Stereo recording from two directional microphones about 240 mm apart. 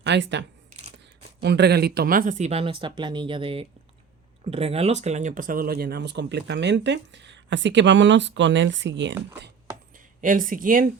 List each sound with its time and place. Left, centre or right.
0.0 s speech: right
0.7 s a sound: right
1.4 s speech: right
10.2 s speech: right